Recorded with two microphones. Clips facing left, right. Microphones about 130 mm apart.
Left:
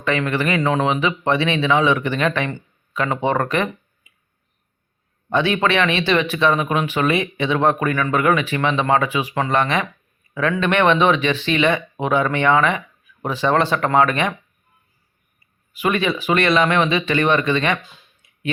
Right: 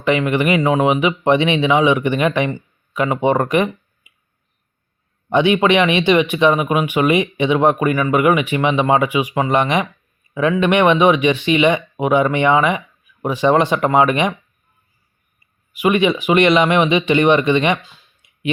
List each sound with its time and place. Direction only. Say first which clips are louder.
0.0 s speech: right 4 dB; 15° right (ahead or behind)
5.3 s speech: right 5 dB; 15° right (ahead or behind)
15.7 s speech: right 5 dB; 15° right (ahead or behind)
18.2 s clicking: even; 15° right (ahead or behind)